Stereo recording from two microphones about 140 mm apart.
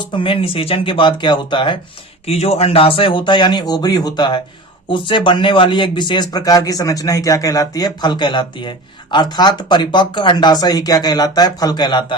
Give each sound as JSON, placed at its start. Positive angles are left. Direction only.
{"t": 0.0, "sound": "a man's voice", "side_deg": 35}
{"t": 2.2, "sound": "a man's voice", "side_deg": 45}